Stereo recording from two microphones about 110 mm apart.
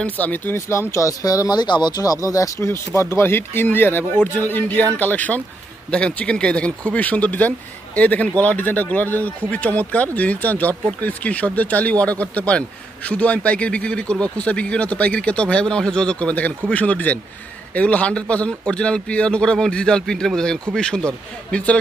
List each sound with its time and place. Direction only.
0.0 s speech: 15° left (ahead or behind)